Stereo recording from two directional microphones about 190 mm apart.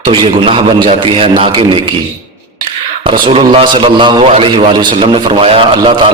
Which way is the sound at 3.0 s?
25° right (ahead or behind).